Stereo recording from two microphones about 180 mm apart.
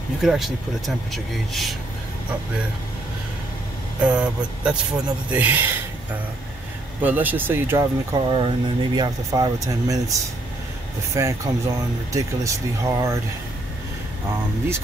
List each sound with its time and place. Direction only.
0.2 s speech: centre (ahead or behind)
4.0 s speech: 5° right (ahead or behind)
7.0 s speech: 10° right (ahead or behind)
11.1 s speech: 15° right (ahead or behind)